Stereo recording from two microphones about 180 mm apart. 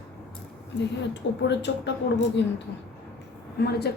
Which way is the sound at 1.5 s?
75° left (ahead or behind).